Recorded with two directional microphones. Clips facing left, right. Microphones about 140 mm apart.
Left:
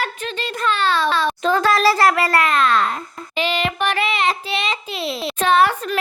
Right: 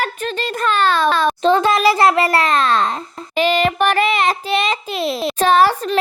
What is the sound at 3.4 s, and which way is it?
Child singing, 45° right (ahead or behind).